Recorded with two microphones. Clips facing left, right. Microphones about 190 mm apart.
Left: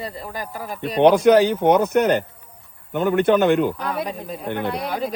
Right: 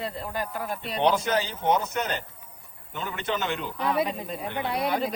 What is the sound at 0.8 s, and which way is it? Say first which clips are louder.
Speech: left 11 dB; 60° left (ahead or behind).